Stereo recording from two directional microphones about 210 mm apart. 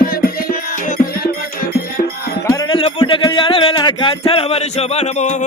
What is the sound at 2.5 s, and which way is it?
Music, 20° left (ahead or behind).